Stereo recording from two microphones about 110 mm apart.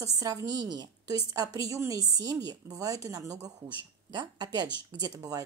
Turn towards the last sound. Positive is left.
turn(degrees=-35)  # may be behind; listen again after turning